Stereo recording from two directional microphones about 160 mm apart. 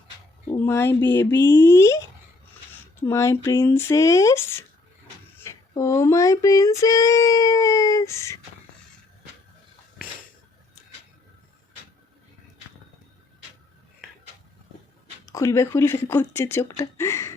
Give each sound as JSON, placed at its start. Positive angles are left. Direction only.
{"t": 0.6, "sound": "speech", "side_deg": 15}
{"t": 5.7, "sound": "child singing", "side_deg": 20}
{"t": 15.3, "sound": "speech", "side_deg": 20}